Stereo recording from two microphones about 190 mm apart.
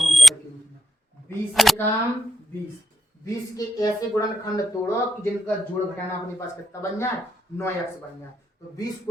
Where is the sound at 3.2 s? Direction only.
20° left (ahead or behind).